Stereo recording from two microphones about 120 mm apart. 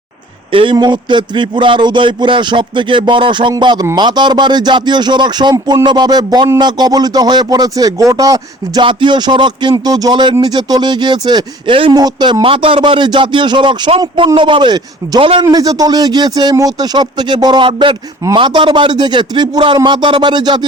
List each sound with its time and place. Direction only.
0.5 s speech: 45° right (ahead or behind)
8.8 s speech: 45° right (ahead or behind)